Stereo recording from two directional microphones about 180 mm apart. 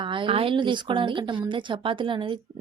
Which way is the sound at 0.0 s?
30° right (ahead or behind).